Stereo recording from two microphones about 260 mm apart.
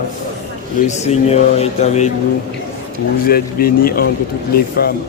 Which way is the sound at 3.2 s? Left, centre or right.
Left.